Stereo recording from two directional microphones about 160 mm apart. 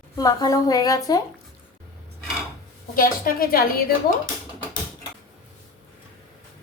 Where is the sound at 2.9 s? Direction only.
60° left (ahead or behind).